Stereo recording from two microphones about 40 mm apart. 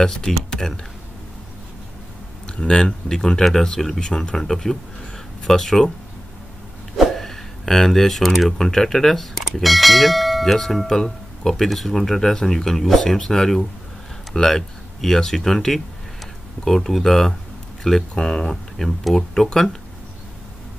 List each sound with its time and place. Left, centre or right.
0.0 s speech: centre
2.4 s speech: left
4.4 s speech: centre
7.0 s speech: centre